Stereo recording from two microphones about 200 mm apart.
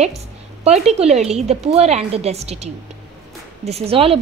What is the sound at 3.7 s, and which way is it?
Speech, 30° right (ahead or behind).